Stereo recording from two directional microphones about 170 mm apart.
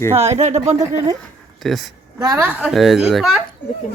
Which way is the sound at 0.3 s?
40° right (ahead or behind).